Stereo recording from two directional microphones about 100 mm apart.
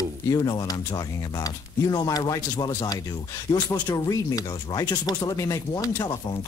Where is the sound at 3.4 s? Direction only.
45° left (ahead or behind).